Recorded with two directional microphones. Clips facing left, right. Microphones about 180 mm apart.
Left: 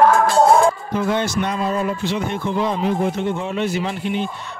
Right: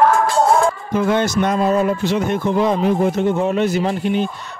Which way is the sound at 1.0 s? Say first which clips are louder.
Right 6 dB; 55° right (ahead or behind).